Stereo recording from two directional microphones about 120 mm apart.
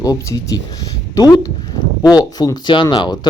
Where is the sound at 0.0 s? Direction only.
30° left (ahead or behind).